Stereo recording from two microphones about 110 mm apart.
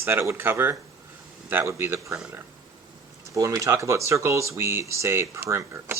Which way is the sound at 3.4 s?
30° right (ahead or behind).